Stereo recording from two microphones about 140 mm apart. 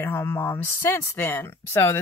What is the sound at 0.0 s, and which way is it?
Speech, 15° left (ahead or behind).